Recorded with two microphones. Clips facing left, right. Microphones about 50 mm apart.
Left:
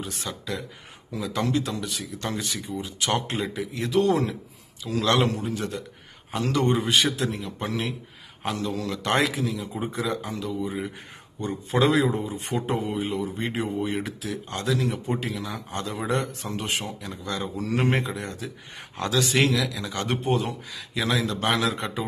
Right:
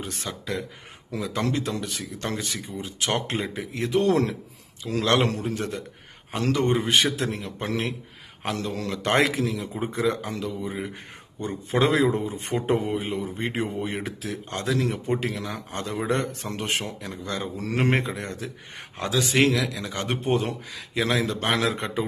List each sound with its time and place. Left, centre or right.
0.0 s a man's voice: right
6.3 s a man's voice: right
9.2 s a man's voice: right
11.4 s a man's voice: right
13.0 s a man's voice: right
15.2 s a man's voice: right
15.7 s a man's voice: right
16.1 s a man's voice: right
18.9 s a man's voice: centre
19.2 s a man's voice: right